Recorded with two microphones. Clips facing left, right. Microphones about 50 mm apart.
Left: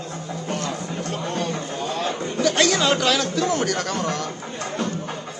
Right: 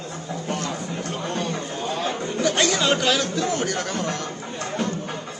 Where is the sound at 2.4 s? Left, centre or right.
Right.